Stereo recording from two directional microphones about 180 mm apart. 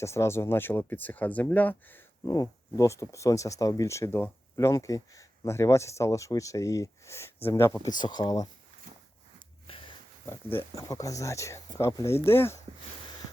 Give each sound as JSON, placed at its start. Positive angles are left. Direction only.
{"t": 0.0, "sound": "speech", "side_deg": 15}
{"t": 2.2, "sound": "speech", "side_deg": 20}
{"t": 9.6, "sound": "a sound", "side_deg": 30}
{"t": 10.8, "sound": "speech", "side_deg": 20}